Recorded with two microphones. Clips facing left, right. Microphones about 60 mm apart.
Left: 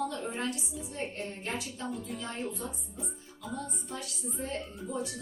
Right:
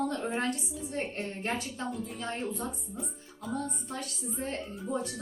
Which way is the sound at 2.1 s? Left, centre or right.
Right.